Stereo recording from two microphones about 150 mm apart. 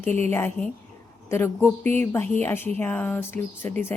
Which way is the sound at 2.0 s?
15° left (ahead or behind).